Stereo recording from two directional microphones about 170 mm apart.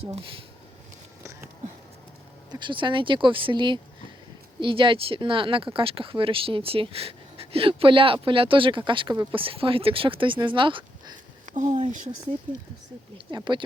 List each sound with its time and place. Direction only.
2.5 s speech: 25° right (ahead or behind)
11.5 s speech: 45° right (ahead or behind)
13.1 s speech: 25° right (ahead or behind)